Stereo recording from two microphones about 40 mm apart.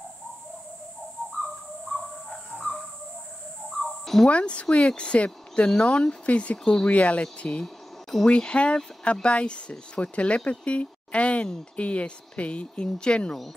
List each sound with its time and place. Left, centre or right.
1.4 s bird: centre
4.0 s a sound: centre
4.3 s speech: left
6.6 s speech: centre
6.9 s speech: left
7.6 s a sound: centre
8.3 s speech: left